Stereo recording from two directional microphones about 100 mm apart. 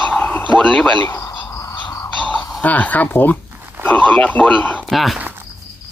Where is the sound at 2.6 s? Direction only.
15° left (ahead or behind).